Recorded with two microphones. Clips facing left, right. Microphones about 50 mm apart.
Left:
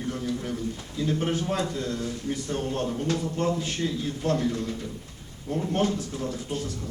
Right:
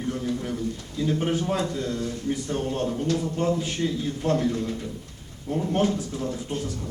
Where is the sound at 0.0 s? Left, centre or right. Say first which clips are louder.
Right 2 dB; centre.